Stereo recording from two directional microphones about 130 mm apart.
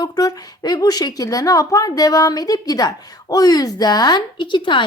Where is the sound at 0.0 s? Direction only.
30° left (ahead or behind).